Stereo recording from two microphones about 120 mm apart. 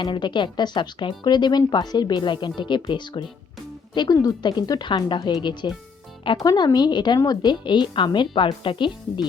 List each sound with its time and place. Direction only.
0.0 s speech: 40° left (ahead or behind)